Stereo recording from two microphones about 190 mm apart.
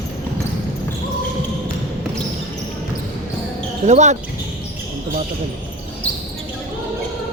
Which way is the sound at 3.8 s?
40° right (ahead or behind).